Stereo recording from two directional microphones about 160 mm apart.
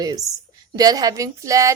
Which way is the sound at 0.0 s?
25° right (ahead or behind).